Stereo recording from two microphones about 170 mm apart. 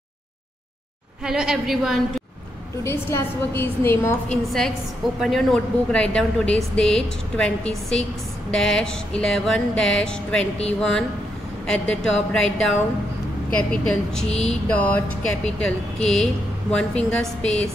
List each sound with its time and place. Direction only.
1.2 s a woman's voice: 5° right (ahead or behind)
2.8 s a woman's voice: 15° left (ahead or behind)
4.5 s a woman's voice: centre (ahead or behind)